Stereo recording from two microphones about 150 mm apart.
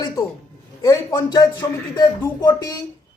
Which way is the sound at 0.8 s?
25° left (ahead or behind).